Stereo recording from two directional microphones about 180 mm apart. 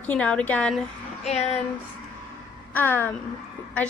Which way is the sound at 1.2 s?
35° left (ahead or behind).